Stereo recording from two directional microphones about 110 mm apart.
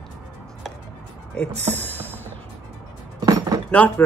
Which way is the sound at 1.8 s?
15° left (ahead or behind).